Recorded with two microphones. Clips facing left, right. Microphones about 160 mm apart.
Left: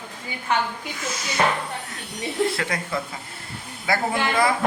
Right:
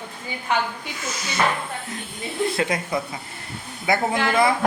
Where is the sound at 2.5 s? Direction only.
20° right (ahead or behind).